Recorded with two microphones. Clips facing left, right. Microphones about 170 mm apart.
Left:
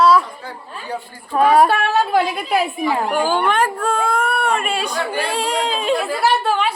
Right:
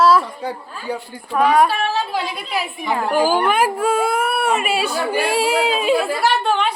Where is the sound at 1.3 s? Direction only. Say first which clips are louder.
Left 2 dB; 35° left (ahead or behind).